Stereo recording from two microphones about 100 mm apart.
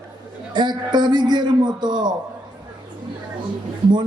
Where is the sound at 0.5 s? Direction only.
50° right (ahead or behind).